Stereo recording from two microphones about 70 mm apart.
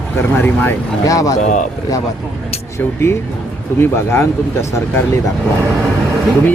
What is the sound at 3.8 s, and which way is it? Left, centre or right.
Speech, left.